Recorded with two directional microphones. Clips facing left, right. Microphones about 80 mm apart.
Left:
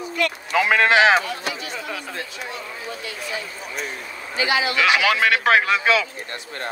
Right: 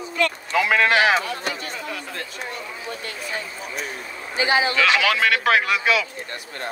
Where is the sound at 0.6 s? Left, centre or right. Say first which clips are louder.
Left 2 dB; left.